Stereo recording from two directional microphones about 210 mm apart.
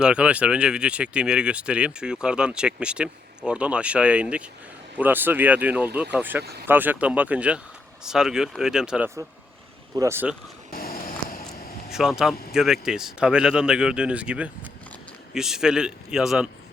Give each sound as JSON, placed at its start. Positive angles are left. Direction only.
{"t": 0.0, "sound": "speech", "side_deg": -5}
{"t": 6.4, "sound": "speech", "side_deg": -50}
{"t": 6.7, "sound": "speech", "side_deg": -10}
{"t": 10.7, "sound": "a sound", "side_deg": 45}
{"t": 11.9, "sound": "speech", "side_deg": 0}